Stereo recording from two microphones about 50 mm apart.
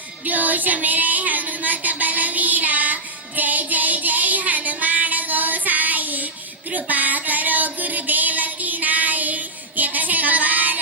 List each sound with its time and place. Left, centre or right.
0.3 s child singing: right
6.7 s female singing: right